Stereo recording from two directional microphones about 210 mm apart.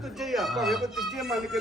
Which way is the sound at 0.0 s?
Centre (ahead or behind).